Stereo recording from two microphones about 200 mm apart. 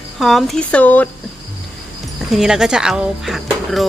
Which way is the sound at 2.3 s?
5° right (ahead or behind).